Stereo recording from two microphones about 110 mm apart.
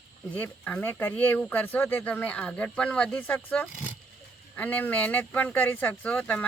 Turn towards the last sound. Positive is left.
turn(degrees=15)  # may be behind; listen again after turning